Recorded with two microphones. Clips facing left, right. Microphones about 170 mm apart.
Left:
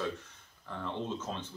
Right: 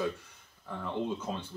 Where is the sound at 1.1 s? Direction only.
10° right (ahead or behind).